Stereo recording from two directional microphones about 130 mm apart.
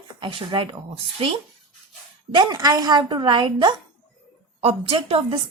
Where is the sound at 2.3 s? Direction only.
30° right (ahead or behind); by 5.3 s 45° right (ahead or behind).